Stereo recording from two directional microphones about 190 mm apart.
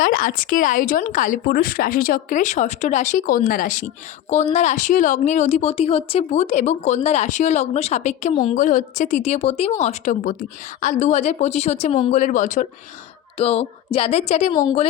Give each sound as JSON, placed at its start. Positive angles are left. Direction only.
{"t": 0.0, "sound": "speech", "side_deg": 45}
{"t": 8.5, "sound": "speech", "side_deg": 45}
{"t": 13.4, "sound": "speech", "side_deg": 30}
{"t": 14.5, "sound": "a woman's voice", "side_deg": 20}